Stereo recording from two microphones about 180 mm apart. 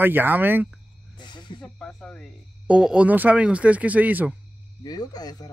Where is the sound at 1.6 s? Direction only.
5° left (ahead or behind).